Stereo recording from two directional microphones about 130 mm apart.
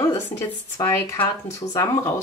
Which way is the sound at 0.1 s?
25° left (ahead or behind).